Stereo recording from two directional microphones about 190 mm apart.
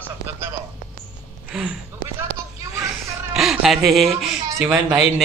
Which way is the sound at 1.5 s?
Centre (ahead or behind).